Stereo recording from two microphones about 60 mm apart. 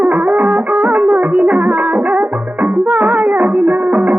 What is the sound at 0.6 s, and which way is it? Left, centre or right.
Music, right.